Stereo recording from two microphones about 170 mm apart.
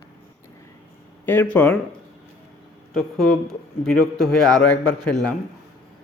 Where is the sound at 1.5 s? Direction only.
10° left (ahead or behind).